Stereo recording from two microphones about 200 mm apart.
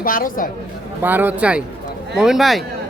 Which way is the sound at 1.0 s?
10° right (ahead or behind).